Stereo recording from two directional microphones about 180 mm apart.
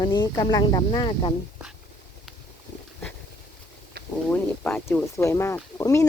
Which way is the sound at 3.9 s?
55° right (ahead or behind).